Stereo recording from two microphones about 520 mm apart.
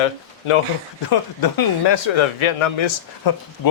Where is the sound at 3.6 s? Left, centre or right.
Left.